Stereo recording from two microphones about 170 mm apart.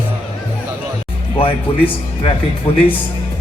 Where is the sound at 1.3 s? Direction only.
30° left (ahead or behind).